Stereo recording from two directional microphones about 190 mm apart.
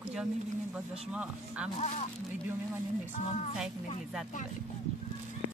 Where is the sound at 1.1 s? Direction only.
5° right (ahead or behind).